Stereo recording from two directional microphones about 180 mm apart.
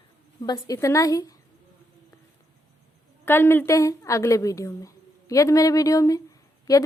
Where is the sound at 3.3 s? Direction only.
10° left (ahead or behind).